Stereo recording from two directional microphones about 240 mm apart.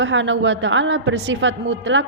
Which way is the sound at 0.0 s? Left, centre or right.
Right.